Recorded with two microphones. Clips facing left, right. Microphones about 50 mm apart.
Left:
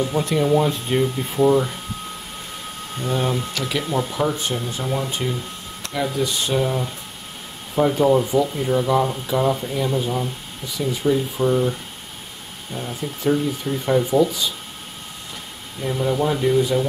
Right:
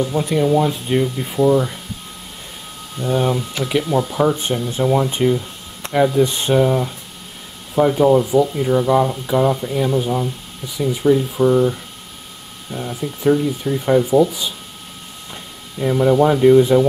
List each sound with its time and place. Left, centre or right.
0.0 s speech: centre
3.2 s speech: centre
5.8 s a sound: right
6.2 s speech: right
6.6 s speech: centre
12.7 s speech: centre
15.8 s speech: right